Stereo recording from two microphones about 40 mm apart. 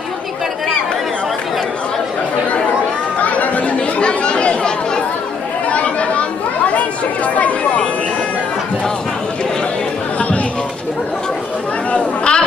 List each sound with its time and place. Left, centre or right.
3.2 s chatter: left
10.1 s chatter: left
11.9 s a sound: left